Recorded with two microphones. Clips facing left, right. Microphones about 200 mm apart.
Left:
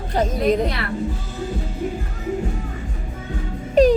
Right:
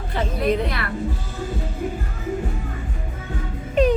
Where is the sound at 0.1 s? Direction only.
40° left (ahead or behind).